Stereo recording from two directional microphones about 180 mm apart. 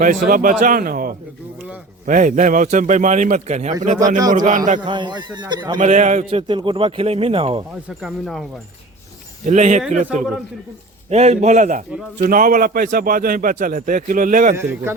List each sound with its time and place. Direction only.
0.0 s a man's voice: 45° right (ahead or behind)
4.8 s a man's voice: 25° right (ahead or behind)
5.8 s speech: 40° right (ahead or behind)
6.5 s speech: 25° right (ahead or behind)
7.9 s speech: centre (ahead or behind)
9.5 s a man's voice: 40° right (ahead or behind)
14.5 s a man's voice: 15° right (ahead or behind)